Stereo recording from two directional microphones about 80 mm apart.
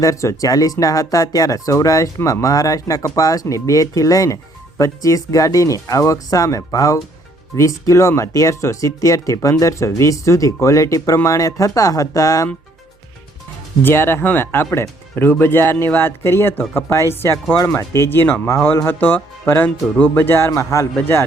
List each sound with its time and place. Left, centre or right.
0.0 s speech: left
13.8 s speech: left
20.6 s a man's voice: left